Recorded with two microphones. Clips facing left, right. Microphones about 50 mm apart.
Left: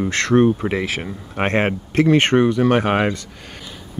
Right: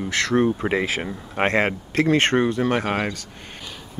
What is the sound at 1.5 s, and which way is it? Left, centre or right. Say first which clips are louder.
Speech: left 4 dB; left.